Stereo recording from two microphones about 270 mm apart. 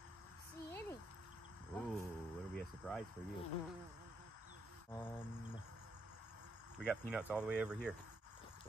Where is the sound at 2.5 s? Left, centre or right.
Centre.